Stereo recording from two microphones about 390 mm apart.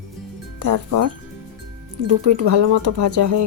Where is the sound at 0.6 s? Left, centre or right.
Right.